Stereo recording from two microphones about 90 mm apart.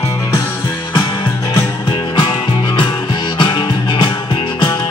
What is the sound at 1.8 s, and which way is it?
Music, 55° left (ahead or behind).